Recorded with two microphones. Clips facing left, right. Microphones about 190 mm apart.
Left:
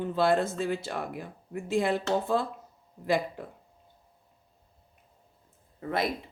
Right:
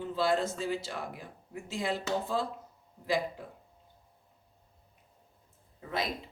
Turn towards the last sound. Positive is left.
turn(degrees=55)  # may be behind; listen again after turning